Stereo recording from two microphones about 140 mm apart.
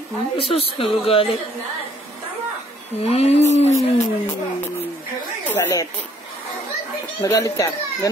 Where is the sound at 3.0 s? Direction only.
50° left (ahead or behind).